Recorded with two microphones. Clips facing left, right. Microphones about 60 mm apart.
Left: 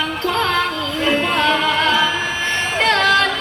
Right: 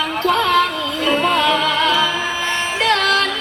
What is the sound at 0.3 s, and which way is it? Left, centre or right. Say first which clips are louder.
Music: right 4 dB; centre.